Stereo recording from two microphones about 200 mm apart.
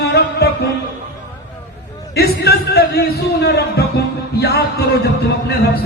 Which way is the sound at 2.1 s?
50° left (ahead or behind).